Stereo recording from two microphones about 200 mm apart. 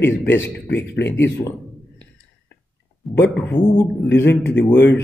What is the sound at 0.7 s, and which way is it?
Speech, 60° left (ahead or behind).